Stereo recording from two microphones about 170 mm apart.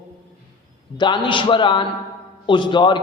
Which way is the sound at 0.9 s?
25° left (ahead or behind).